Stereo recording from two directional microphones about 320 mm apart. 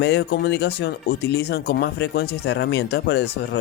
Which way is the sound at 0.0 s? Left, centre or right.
Left.